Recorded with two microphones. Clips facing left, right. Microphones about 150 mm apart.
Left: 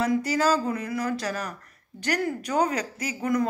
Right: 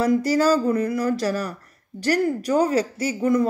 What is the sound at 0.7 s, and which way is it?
A woman's voice, 35° right (ahead or behind).